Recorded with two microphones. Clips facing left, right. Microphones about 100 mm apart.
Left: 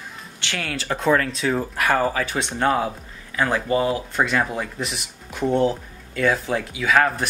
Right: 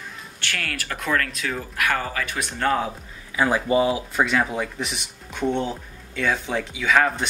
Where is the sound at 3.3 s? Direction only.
10° right (ahead or behind).